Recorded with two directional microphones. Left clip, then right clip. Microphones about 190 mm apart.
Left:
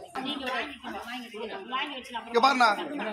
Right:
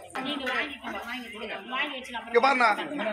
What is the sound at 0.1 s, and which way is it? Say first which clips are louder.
A woman's voice: right 2 dB; 5° right (ahead or behind).